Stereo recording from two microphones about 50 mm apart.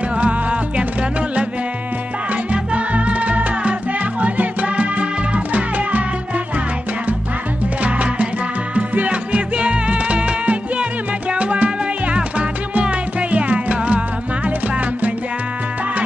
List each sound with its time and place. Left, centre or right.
0.1 s music: right
2.5 s music: right
7.8 s music: right